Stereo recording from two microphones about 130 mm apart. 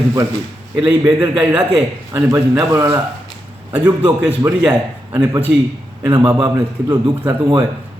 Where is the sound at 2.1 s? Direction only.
20° right (ahead or behind).